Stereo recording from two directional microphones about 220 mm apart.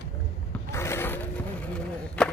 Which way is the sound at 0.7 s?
10° left (ahead or behind).